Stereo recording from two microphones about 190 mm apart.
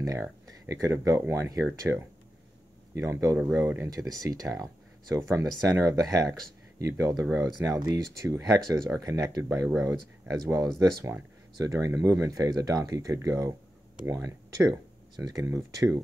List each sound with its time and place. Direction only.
0.5 s speech: 15° right (ahead or behind)